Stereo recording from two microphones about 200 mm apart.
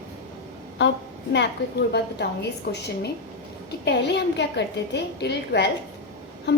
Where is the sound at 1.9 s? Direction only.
55° left (ahead or behind).